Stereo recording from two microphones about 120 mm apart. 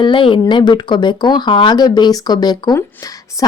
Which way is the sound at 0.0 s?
45° left (ahead or behind).